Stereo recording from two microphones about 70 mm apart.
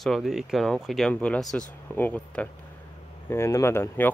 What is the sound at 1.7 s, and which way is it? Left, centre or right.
Speech, left.